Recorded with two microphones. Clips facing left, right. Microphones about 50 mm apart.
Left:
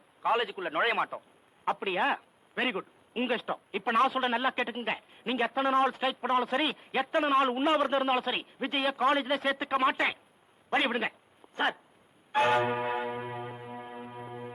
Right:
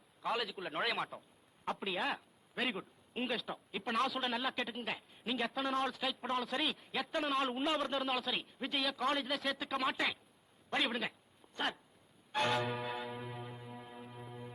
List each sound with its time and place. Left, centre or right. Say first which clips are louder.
0.2 s a man's voice: left 9 dB; left
11.5 s a sound: left 8 dB; left
12.3 s church bell: left 8 dB; left